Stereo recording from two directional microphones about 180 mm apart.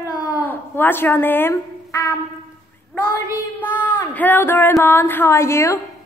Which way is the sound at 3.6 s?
10° left (ahead or behind).